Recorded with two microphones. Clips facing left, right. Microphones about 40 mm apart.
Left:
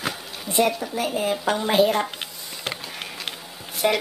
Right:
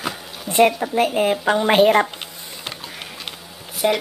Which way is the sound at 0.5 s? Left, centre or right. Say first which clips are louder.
Right 6 dB; right.